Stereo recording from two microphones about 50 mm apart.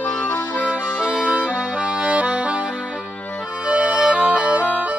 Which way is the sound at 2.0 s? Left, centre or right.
Right.